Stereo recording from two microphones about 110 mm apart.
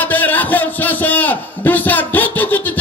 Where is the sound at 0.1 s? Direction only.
15° left (ahead or behind).